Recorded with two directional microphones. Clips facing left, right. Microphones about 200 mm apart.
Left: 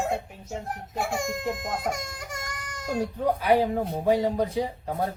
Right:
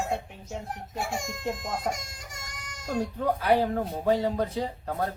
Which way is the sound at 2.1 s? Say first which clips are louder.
Left 8 dB; 55° left (ahead or behind).